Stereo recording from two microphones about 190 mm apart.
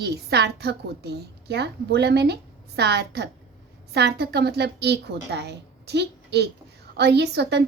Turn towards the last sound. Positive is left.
turn(degrees=-60)  # may be behind; listen again after turning